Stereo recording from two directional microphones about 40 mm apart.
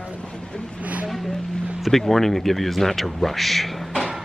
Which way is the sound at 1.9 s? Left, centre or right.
Centre.